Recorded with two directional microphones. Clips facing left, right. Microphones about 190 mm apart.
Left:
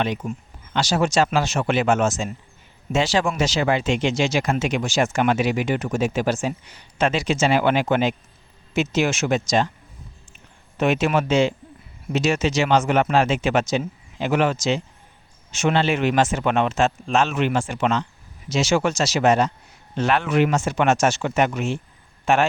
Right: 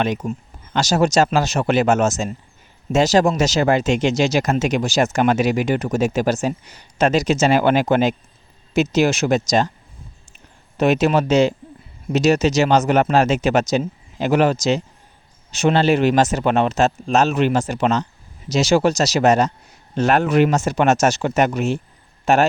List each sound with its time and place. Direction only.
0.0 s speech: 45° right (ahead or behind)
10.8 s speech: 40° right (ahead or behind)